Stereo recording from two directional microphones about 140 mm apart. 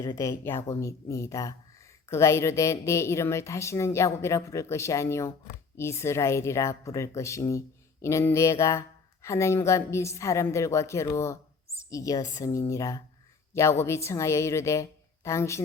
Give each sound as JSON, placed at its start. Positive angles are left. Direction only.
{"t": 0.0, "sound": "speech", "side_deg": 20}